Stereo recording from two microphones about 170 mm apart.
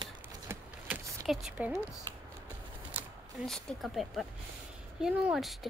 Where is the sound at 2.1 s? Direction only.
20° right (ahead or behind).